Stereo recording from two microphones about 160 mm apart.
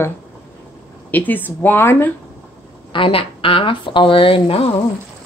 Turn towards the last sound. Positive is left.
turn(degrees=35)  # may be behind; listen again after turning